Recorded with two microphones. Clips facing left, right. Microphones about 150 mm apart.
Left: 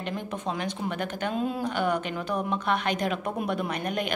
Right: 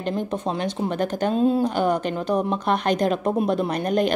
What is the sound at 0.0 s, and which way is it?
A woman's voice, 30° right (ahead or behind).